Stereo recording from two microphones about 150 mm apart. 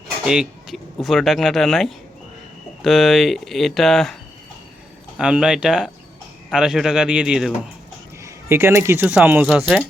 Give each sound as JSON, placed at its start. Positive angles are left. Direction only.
{"t": 0.3, "sound": "speech", "side_deg": -5}
{"t": 8.2, "sound": "speech", "side_deg": -15}